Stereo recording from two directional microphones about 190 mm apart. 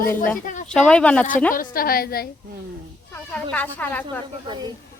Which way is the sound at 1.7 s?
50° left (ahead or behind).